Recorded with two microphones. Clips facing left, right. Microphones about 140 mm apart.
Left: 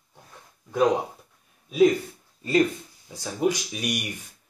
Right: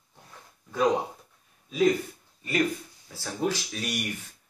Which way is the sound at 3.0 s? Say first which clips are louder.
Left 4 dB; 15° left (ahead or behind).